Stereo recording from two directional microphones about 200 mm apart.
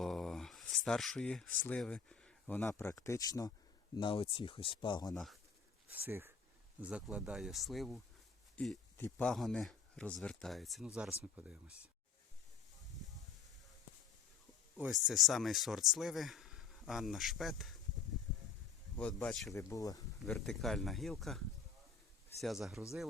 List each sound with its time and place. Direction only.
0.0 s speech: centre (ahead or behind); by 5.1 s 20° left (ahead or behind)
5.1 s speech: centre (ahead or behind)
5.9 s speech: 10° right (ahead or behind)
14.8 s speech: 5° right (ahead or behind)
18.9 s speech: 5° left (ahead or behind)
19.5 s speech: 15° left (ahead or behind)
20.2 s speech: centre (ahead or behind)